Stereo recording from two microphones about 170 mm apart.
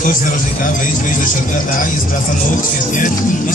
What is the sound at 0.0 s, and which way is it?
Speech, 50° left (ahead or behind).